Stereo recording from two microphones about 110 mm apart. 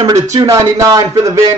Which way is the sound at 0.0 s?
35° right (ahead or behind).